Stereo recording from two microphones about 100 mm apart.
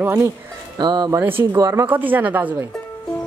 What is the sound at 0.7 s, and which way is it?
Speech, 45° right (ahead or behind).